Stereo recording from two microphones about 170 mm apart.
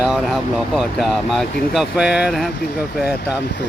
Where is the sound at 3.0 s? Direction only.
70° left (ahead or behind).